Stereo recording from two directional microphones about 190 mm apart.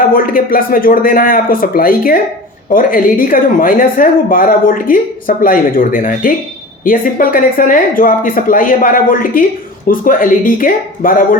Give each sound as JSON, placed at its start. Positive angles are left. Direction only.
{"t": 0.1, "sound": "speech", "side_deg": 50}